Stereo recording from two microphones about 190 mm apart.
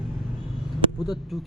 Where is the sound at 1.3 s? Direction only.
Centre (ahead or behind).